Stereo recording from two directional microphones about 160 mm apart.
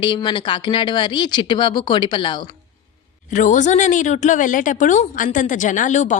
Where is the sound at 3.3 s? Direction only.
50° left (ahead or behind).